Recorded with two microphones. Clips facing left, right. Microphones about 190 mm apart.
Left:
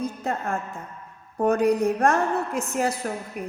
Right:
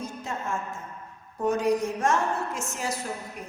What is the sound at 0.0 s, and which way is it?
A woman's voice, 60° left (ahead or behind).